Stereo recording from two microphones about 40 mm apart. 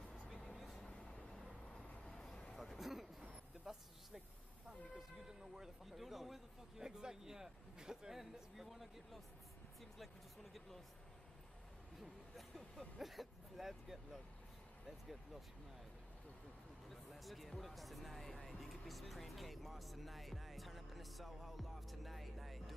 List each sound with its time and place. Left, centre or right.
0.4 s vehicle: centre
0.8 s a sound: left
2.0 s vehicle: centre
2.5 s a sound: centre
3.7 s speech: centre
5.6 s speech: centre
6.8 s speech: centre
12.0 s speech: centre
16.9 s speech: centre